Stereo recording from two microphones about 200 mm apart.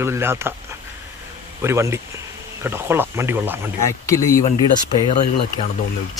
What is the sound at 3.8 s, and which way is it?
Speech, 15° left (ahead or behind).